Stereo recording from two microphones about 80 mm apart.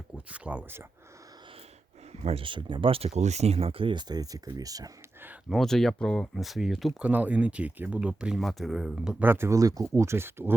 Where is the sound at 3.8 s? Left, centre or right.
Right.